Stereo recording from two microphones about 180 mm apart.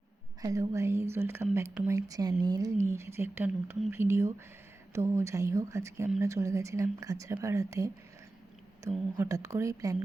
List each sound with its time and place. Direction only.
0.4 s speech: 20° right (ahead or behind)
9.1 s speech: 15° right (ahead or behind)